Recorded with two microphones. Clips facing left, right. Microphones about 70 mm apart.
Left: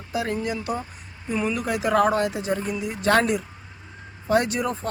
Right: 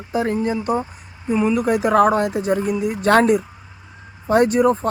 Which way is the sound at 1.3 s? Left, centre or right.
Centre.